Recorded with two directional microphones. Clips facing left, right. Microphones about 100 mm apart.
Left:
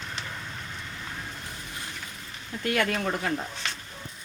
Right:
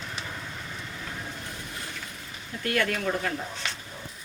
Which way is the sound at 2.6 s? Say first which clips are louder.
Left 1 dB; 20° left (ahead or behind).